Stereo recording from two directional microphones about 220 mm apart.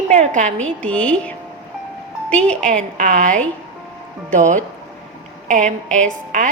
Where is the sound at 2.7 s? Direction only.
35° right (ahead or behind).